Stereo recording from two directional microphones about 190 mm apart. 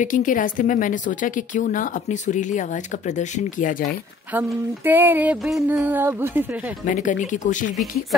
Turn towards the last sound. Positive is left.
turn(degrees=40)  # may be behind; listen again after turning